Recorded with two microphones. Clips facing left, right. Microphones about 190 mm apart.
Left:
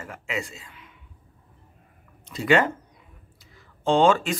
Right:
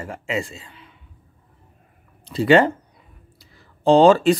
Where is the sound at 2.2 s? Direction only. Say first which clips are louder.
Right 6 dB; 30° right (ahead or behind).